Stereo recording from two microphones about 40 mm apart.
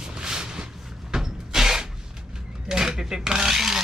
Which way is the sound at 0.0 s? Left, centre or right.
Centre.